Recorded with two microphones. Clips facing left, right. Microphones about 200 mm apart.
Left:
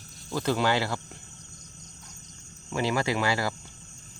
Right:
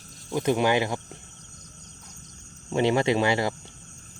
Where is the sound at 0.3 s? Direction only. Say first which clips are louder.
Right 3 dB; 20° right (ahead or behind).